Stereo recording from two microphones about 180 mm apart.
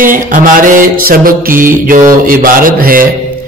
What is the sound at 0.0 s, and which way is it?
Speech, 50° right (ahead or behind).